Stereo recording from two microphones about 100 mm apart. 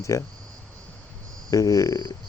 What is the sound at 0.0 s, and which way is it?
Speech, 30° left (ahead or behind).